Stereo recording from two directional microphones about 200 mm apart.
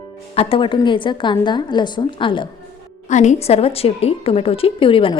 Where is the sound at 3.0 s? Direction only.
35° left (ahead or behind).